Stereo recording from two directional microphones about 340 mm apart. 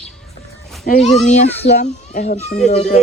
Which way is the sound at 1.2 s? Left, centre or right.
Left.